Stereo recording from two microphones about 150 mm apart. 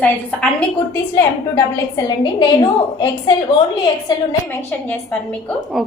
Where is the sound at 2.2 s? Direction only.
30° left (ahead or behind).